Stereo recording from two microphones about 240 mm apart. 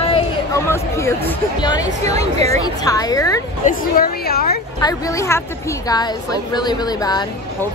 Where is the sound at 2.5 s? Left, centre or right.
Centre.